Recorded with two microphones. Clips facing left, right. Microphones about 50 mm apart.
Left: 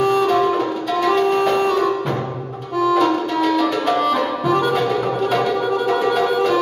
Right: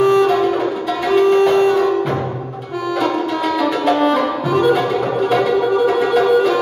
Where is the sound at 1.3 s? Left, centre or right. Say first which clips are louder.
Right 4 dB; centre.